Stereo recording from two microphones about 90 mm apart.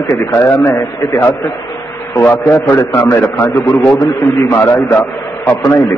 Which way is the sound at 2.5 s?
25° left (ahead or behind).